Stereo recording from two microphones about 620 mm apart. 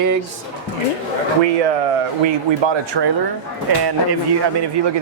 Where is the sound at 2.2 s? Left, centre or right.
Right.